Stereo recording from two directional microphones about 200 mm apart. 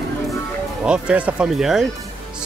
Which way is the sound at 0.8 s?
5° right (ahead or behind).